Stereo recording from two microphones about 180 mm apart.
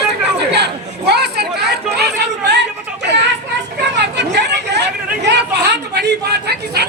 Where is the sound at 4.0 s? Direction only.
70° right (ahead or behind).